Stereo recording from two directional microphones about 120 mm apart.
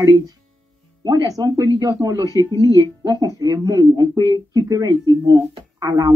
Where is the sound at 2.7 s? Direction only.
30° right (ahead or behind).